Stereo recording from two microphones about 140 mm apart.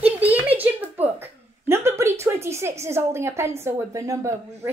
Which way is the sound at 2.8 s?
20° right (ahead or behind).